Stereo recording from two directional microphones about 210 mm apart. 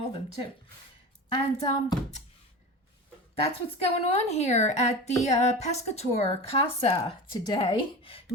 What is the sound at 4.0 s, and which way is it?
A woman's voice, 30° left (ahead or behind).